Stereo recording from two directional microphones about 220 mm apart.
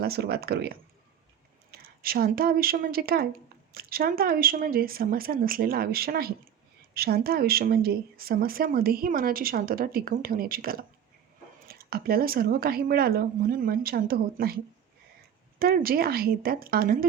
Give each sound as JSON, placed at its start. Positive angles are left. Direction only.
{"t": 0.0, "sound": "speech", "side_deg": -45}